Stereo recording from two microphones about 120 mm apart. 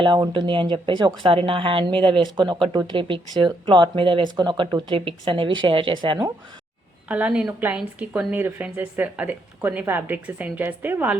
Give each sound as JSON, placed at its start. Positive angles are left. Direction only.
{"t": 0.0, "sound": "a woman's voice", "side_deg": -40}
{"t": 7.1, "sound": "speech", "side_deg": -10}